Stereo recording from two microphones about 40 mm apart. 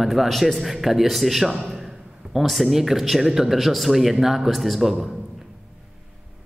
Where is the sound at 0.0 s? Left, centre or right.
Centre.